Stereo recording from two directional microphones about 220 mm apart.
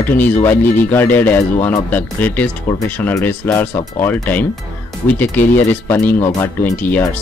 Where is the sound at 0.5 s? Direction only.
10° left (ahead or behind).